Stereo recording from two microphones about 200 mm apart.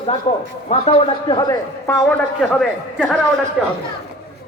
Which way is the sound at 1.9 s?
10° left (ahead or behind).